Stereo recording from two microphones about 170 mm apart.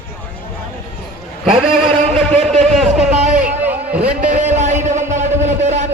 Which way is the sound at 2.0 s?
40° right (ahead or behind).